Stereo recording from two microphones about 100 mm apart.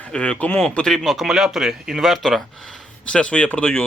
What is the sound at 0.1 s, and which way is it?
Speech, 10° left (ahead or behind).